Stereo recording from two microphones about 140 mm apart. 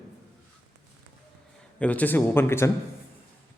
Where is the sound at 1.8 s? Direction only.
10° left (ahead or behind).